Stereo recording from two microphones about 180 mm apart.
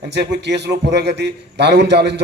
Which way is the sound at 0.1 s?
75° right (ahead or behind).